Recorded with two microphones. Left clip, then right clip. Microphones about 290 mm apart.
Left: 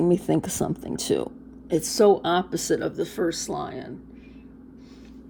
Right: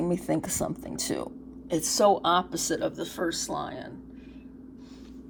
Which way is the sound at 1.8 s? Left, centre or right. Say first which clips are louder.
Left 3 dB; left.